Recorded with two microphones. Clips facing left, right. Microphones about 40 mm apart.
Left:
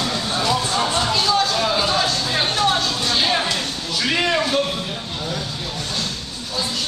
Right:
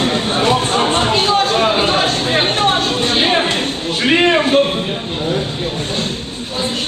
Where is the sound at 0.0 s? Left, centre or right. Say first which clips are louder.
Right 6 dB; right.